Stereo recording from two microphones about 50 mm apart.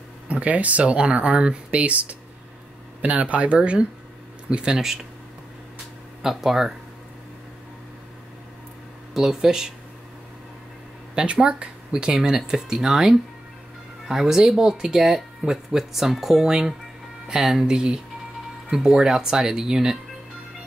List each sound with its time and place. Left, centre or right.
0.3 s speech: right
6.2 s speech: centre
9.1 s speech: centre
11.1 s speech: centre
14.2 s speech: centre